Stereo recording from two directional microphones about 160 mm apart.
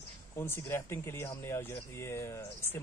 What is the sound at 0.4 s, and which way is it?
Speech, 15° left (ahead or behind).